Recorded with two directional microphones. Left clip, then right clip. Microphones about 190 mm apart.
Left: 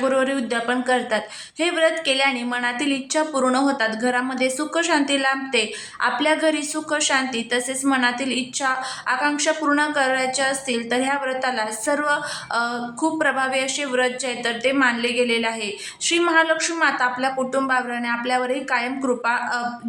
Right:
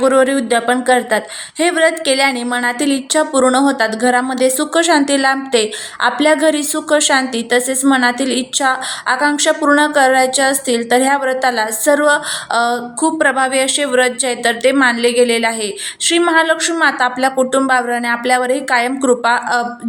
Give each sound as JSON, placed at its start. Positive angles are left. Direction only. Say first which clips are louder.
{"t": 0.0, "sound": "speech", "louder": "right 8 dB", "side_deg": -25}
{"t": 16.0, "sound": "speech", "louder": "right 6 dB", "side_deg": -25}